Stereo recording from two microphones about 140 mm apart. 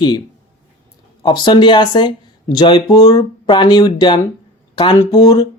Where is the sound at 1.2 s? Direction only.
35° left (ahead or behind).